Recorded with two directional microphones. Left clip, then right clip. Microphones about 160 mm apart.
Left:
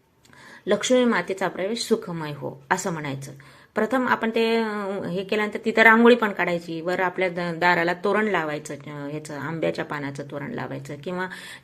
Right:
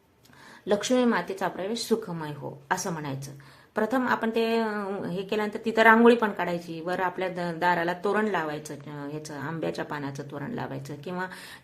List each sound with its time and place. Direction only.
0.7 s a woman's voice: 10° left (ahead or behind)